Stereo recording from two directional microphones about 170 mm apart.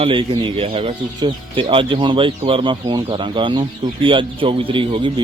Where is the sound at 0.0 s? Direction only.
30° right (ahead or behind).